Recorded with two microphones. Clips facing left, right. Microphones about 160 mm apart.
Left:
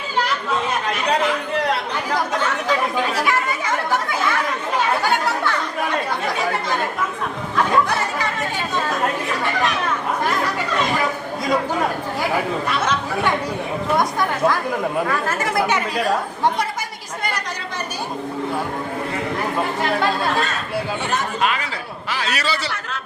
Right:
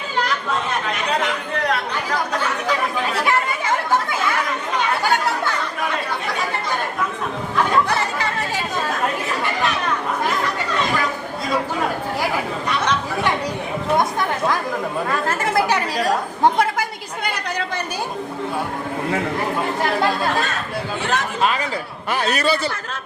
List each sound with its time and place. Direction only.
22.1 s a man's voice: 55° right (ahead or behind)